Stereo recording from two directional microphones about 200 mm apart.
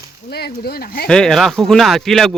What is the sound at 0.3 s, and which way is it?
Speech, 50° left (ahead or behind).